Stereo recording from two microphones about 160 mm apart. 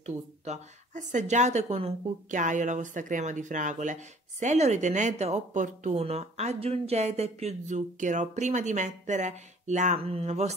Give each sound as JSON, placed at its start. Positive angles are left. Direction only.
{"t": 0.0, "sound": "speech", "side_deg": -45}